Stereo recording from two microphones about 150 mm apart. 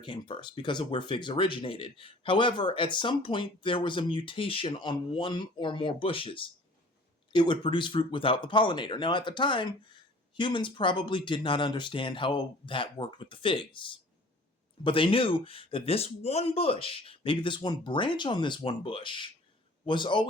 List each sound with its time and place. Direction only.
0.0 s speech: 30° left (ahead or behind)